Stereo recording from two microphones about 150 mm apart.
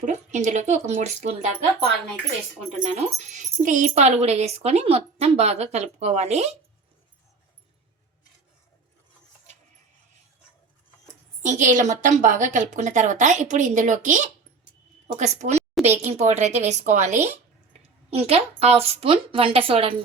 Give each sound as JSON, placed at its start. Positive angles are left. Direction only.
{"t": 0.0, "sound": "speech", "side_deg": -55}
{"t": 2.7, "sound": "speech", "side_deg": -50}
{"t": 11.4, "sound": "a woman's voice", "side_deg": -55}